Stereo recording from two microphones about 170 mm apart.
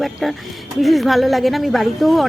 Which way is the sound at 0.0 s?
Centre (ahead or behind).